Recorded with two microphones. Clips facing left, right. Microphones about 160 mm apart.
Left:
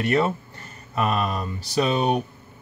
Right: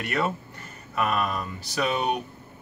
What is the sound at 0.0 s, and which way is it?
Speech, 30° left (ahead or behind).